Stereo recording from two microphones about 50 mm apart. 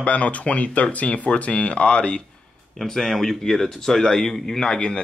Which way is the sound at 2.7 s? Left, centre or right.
Centre.